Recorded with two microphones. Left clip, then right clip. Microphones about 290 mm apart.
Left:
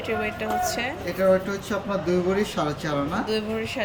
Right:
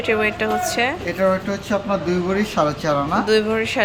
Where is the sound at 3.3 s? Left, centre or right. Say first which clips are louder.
Right 9 dB; centre.